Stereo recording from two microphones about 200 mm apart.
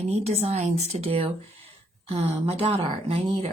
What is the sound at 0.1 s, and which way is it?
Speech, 35° right (ahead or behind).